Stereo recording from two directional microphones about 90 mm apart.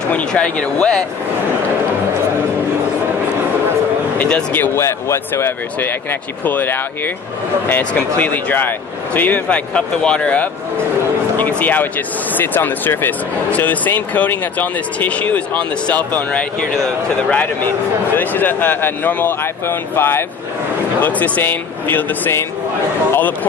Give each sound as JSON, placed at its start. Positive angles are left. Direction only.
{"t": 0.1, "sound": "speech", "side_deg": 10}
{"t": 4.2, "sound": "speech", "side_deg": 20}
{"t": 4.7, "sound": "speech", "side_deg": 30}